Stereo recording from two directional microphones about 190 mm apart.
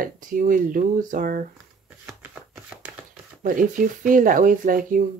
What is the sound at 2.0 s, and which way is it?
Shuffling cards, 5° right (ahead or behind).